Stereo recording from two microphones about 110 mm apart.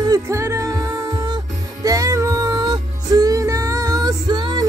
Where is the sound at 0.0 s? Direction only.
30° right (ahead or behind).